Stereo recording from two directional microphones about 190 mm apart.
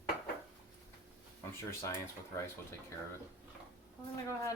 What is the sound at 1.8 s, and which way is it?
Speech, 15° left (ahead or behind).